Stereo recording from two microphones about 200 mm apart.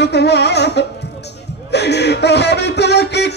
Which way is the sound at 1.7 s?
55° left (ahead or behind).